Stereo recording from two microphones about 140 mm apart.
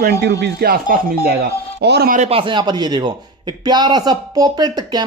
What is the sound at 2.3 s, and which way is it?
A man's voice, 35° right (ahead or behind).